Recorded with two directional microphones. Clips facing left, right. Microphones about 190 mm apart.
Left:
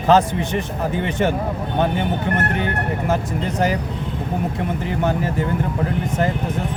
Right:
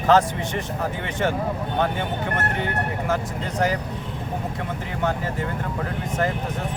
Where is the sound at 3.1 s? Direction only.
20° left (ahead or behind).